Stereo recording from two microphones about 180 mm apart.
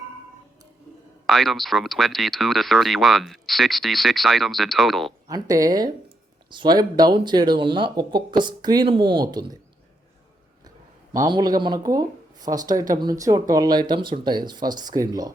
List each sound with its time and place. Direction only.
1.3 s speech: centre (ahead or behind)
5.3 s speech: 20° right (ahead or behind)
11.1 s speech: 20° right (ahead or behind)